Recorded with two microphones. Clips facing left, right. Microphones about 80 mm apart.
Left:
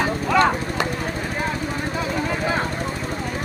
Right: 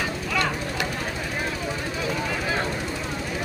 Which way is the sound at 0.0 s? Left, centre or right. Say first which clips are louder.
Left 8 dB; left.